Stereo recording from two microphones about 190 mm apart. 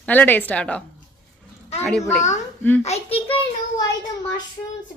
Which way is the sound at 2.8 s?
35° left (ahead or behind).